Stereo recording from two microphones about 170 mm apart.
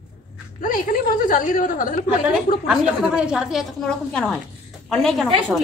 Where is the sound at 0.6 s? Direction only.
55° left (ahead or behind).